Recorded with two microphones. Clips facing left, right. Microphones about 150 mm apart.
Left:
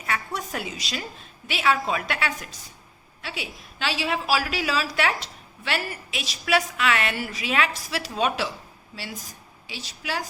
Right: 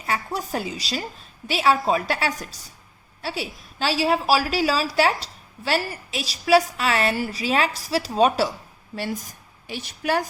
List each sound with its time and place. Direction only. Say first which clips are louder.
0.0 s a woman's voice: right 3 dB; 30° right (ahead or behind)
9.0 s a woman's voice: right 8 dB; 50° right (ahead or behind)